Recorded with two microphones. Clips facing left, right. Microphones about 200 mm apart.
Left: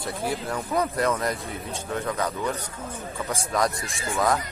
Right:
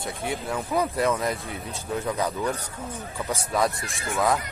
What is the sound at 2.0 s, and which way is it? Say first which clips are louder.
Speech: right 1 dB; 15° right (ahead or behind).